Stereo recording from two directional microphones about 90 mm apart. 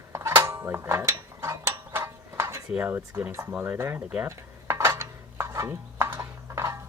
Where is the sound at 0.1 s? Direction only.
30° right (ahead or behind).